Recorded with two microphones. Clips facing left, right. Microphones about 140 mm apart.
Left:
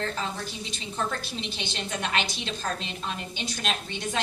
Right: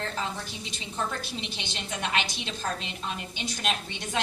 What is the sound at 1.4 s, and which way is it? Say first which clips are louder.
Speech: left 3 dB; 15° right (ahead or behind).